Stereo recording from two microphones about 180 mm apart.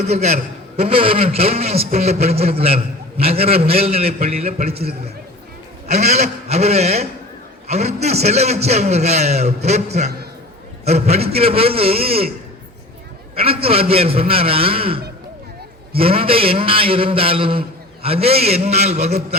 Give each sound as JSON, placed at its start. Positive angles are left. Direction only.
{"t": 0.0, "sound": "a man's voice", "side_deg": -40}
{"t": 5.9, "sound": "a man's voice", "side_deg": -40}
{"t": 13.3, "sound": "a man's voice", "side_deg": -30}